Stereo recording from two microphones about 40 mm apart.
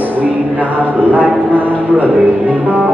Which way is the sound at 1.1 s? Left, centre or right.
Right.